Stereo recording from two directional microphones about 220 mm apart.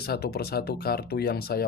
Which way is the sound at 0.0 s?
45° left (ahead or behind).